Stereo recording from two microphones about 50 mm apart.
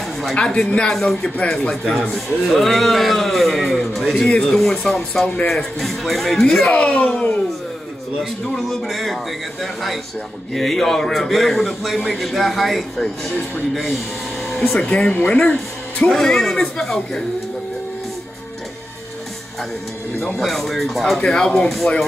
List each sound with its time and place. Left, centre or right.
0.4 s a man's voice: centre
6.4 s speech: centre
8.5 s a man's voice: centre
14.8 s speech: left
16.1 s speech: centre
20.3 s a man's voice: centre
21.2 s speech: centre